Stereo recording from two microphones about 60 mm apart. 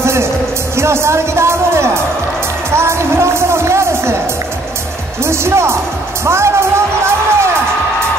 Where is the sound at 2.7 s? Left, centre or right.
Right.